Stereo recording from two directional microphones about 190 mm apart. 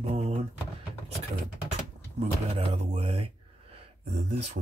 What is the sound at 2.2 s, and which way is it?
Speech, 30° right (ahead or behind).